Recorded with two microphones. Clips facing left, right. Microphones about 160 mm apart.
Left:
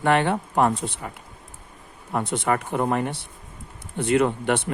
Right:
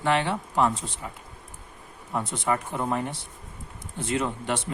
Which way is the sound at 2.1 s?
65° left (ahead or behind).